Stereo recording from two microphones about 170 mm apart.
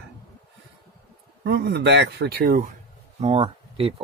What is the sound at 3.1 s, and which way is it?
Speech, 35° right (ahead or behind).